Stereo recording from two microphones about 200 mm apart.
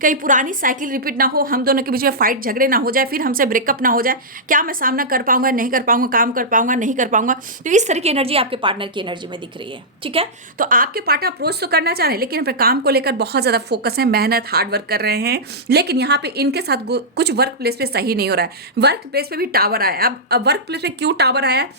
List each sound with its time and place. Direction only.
0.0 s a woman's voice: 40° right (ahead or behind)
10.6 s a woman's voice: 45° right (ahead or behind)